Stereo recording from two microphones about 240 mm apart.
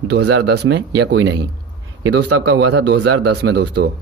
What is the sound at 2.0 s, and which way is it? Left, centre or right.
Speech, right.